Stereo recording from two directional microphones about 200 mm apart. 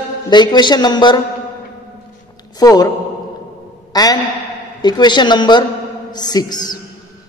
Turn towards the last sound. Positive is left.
turn(degrees=20)  # may be behind; listen again after turning